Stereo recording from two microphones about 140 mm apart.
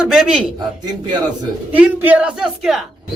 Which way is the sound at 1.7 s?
10° right (ahead or behind).